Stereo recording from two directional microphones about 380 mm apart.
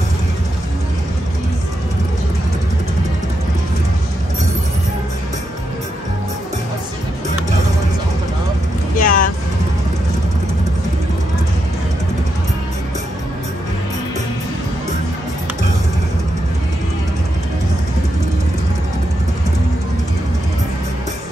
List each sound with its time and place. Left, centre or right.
8.9 s vehicle: left